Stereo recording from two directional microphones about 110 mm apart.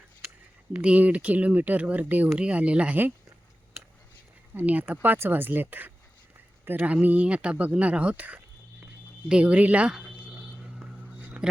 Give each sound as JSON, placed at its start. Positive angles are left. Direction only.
{"t": 0.7, "sound": "speech", "side_deg": -10}
{"t": 4.5, "sound": "speech", "side_deg": -15}
{"t": 10.2, "sound": "a sound", "side_deg": -10}